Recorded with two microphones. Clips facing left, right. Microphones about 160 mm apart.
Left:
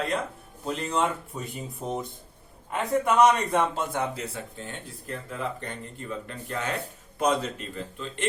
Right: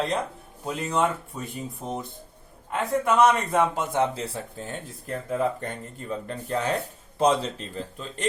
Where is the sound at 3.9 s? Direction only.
25° right (ahead or behind).